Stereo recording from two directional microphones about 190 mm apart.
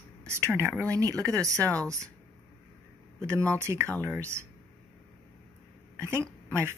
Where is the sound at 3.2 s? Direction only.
15° right (ahead or behind).